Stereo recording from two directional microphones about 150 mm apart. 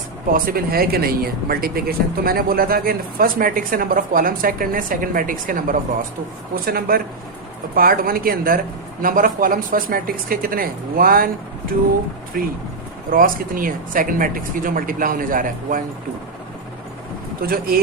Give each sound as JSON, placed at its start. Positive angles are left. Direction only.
{"t": 0.3, "sound": "speech", "side_deg": -70}
{"t": 6.7, "sound": "speech", "side_deg": -75}
{"t": 12.4, "sound": "speech", "side_deg": -70}
{"t": 17.4, "sound": "speech", "side_deg": -80}